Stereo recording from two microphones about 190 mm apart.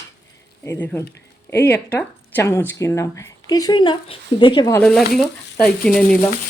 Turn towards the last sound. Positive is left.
turn(degrees=5)  # may be behind; listen again after turning